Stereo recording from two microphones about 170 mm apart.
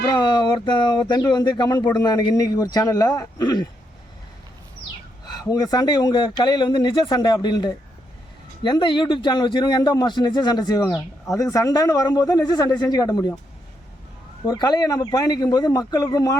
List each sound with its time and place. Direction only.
0.0 s speech: 25° left (ahead or behind)
5.5 s speech: 25° left (ahead or behind)
14.4 s speech: 25° left (ahead or behind)